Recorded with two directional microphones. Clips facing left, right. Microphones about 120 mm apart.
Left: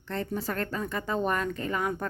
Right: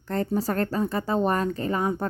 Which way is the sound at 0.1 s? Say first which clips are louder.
Right 6 dB; 40° right (ahead or behind).